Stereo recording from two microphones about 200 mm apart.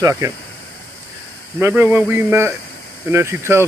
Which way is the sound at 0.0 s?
15° right (ahead or behind).